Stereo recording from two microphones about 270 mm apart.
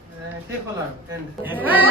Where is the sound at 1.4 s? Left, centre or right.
Centre.